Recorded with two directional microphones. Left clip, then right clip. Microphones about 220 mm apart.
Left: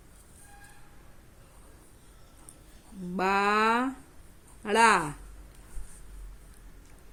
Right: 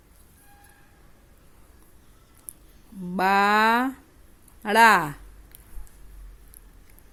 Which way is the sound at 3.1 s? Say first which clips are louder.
Right 6 dB; 30° right (ahead or behind).